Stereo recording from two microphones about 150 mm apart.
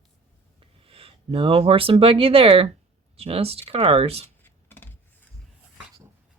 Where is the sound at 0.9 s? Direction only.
40° right (ahead or behind).